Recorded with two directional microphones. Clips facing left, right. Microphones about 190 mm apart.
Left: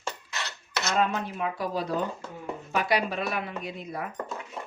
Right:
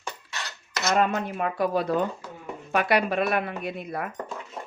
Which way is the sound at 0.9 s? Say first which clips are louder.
Right 4 dB; 55° right (ahead or behind).